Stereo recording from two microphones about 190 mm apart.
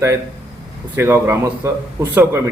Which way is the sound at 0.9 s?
10° right (ahead or behind).